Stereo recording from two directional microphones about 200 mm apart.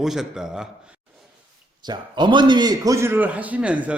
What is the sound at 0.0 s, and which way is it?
Speech, centre (ahead or behind).